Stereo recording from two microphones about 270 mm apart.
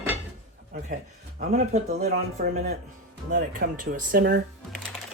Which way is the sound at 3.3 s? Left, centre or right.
Right.